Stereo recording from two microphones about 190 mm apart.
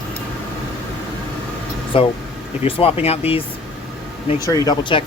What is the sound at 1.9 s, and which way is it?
Speech, 30° left (ahead or behind).